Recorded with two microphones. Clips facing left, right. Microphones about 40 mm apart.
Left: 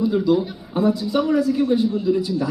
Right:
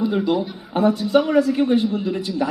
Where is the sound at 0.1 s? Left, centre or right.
Right.